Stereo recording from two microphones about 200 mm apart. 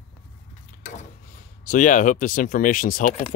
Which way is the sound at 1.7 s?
40° left (ahead or behind).